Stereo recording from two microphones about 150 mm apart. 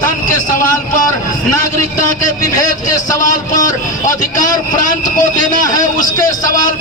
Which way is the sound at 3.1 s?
60° left (ahead or behind).